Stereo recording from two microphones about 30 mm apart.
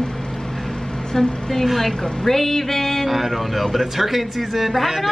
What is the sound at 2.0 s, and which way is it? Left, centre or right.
Speech, centre.